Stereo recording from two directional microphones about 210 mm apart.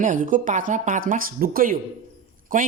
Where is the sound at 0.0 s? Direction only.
40° right (ahead or behind).